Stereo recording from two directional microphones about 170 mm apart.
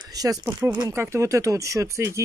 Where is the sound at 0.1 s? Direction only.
20° right (ahead or behind).